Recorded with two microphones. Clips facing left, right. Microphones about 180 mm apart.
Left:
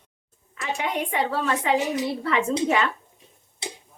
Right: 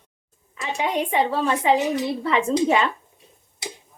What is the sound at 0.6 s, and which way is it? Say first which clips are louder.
A woman's voice: right 3 dB; 20° right (ahead or behind).